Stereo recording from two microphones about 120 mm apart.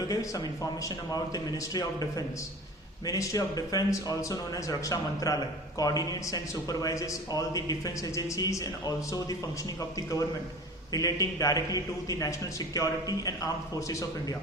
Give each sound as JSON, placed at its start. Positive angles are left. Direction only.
{"t": 0.1, "sound": "a man's voice", "side_deg": 30}
{"t": 10.9, "sound": "a man's voice", "side_deg": 30}